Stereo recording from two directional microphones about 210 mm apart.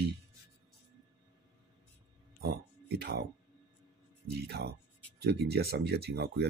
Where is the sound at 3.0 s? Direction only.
50° right (ahead or behind).